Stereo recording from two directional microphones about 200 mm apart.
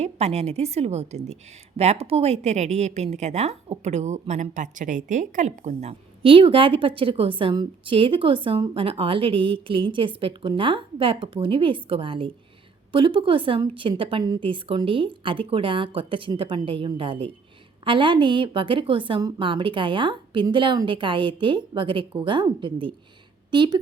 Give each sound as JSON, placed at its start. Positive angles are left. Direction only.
{"t": 0.0, "sound": "a woman's voice", "side_deg": -35}